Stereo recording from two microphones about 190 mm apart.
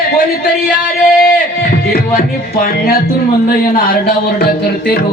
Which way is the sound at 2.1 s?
50° left (ahead or behind).